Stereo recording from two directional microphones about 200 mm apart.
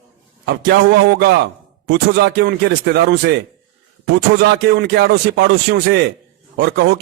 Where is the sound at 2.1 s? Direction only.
55° right (ahead or behind).